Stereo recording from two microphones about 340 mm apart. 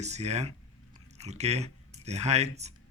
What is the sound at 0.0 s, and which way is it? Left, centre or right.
A man's voice, centre.